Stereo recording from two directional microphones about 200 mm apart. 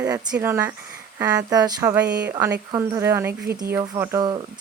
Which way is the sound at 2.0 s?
55° right (ahead or behind).